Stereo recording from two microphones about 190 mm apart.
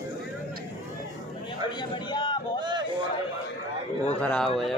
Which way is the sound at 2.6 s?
25° right (ahead or behind).